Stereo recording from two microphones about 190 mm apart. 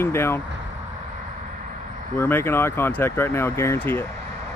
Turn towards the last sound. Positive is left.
turn(degrees=10)  # may be behind; listen again after turning